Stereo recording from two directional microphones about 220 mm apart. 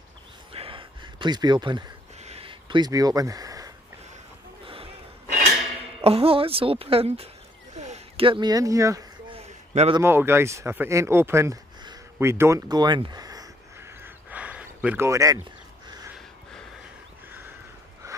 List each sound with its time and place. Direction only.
0.5 s a sound: 25° right (ahead or behind)
5.9 s speech: 25° right (ahead or behind)
7.7 s a sound: 30° right (ahead or behind); by 9.4 s 15° right (ahead or behind)
9.8 s speech: 25° right (ahead or behind)
10.0 s speech: 10° right (ahead or behind)
14.0 s duck: 5° right (ahead or behind)